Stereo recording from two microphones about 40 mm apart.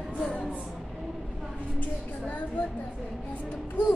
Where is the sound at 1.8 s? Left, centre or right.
Left.